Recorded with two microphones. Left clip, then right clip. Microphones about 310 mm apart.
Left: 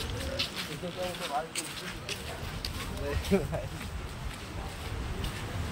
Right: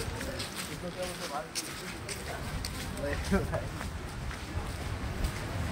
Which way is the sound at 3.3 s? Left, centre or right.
Left.